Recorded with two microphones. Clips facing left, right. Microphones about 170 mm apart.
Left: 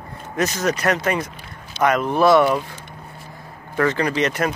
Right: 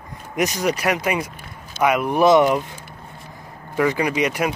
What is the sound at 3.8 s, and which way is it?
Speech, 10° right (ahead or behind).